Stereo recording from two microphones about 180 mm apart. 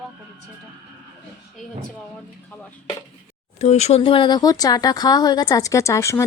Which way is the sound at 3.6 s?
40° left (ahead or behind).